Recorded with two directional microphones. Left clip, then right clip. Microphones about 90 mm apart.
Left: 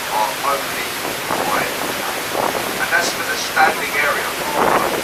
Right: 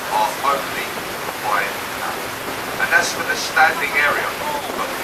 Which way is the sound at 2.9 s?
20° left (ahead or behind).